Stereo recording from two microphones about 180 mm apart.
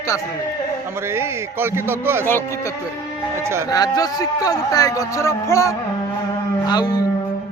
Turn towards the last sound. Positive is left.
turn(degrees=20)  # may be behind; listen again after turning